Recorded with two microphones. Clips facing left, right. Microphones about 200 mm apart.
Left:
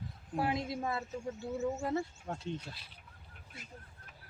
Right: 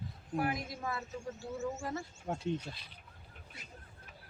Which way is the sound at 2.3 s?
15° right (ahead or behind).